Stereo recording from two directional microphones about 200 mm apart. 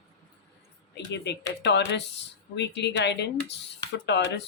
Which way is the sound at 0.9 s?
60° left (ahead or behind).